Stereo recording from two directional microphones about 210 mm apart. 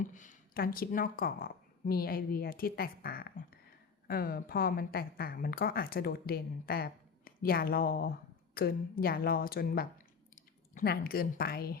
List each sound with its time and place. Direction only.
0.0 s speech: 40° left (ahead or behind)